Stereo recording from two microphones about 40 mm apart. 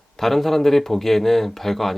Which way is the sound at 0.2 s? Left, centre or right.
Centre.